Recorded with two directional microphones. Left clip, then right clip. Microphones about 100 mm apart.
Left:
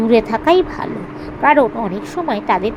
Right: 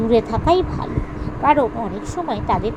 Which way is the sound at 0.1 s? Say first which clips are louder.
Left 4 dB; 45° left (ahead or behind).